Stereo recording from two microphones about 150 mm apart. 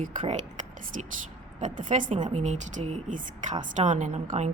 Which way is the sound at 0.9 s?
60° right (ahead or behind).